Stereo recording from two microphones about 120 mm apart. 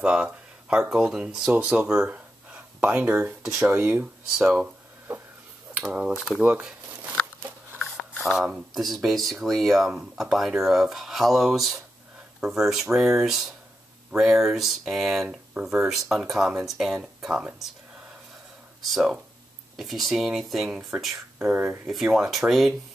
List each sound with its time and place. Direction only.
0.0 s speech: 5° right (ahead or behind)
5.8 s speech: 10° right (ahead or behind)
6.4 s a sound: 10° right (ahead or behind)
7.8 s speech: centre (ahead or behind)
18.8 s speech: centre (ahead or behind)
21.4 s speech: 15° right (ahead or behind)
21.8 s speech: 5° right (ahead or behind)